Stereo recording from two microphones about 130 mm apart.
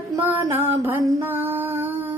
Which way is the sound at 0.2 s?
15° right (ahead or behind).